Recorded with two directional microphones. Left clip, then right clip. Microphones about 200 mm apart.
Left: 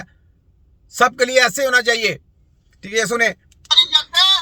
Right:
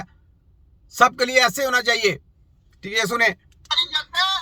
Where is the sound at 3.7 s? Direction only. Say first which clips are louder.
Left 8 dB; 30° left (ahead or behind).